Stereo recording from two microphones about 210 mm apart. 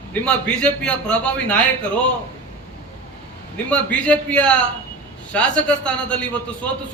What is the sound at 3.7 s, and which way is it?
A man's voice, 5° left (ahead or behind).